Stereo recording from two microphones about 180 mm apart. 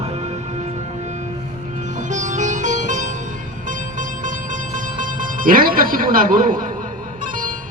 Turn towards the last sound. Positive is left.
turn(degrees=-50)  # may be behind; listen again after turning